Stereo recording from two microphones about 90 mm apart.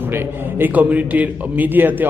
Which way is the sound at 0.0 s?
25° right (ahead or behind).